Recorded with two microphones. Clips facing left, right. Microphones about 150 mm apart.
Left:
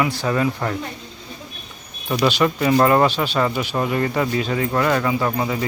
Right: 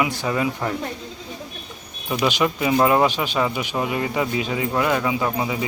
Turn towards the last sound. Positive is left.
turn(degrees=-5)  # may be behind; listen again after turning